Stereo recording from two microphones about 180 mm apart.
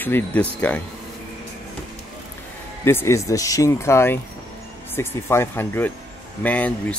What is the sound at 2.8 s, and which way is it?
Speech, 15° left (ahead or behind).